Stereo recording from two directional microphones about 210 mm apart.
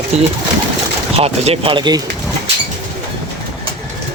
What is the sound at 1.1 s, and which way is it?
Speech, 30° right (ahead or behind).